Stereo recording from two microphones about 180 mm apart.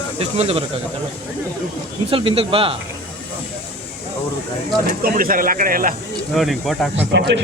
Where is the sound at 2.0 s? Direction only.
30° right (ahead or behind).